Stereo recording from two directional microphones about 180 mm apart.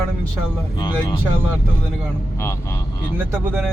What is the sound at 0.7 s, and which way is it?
Speech, 25° left (ahead or behind).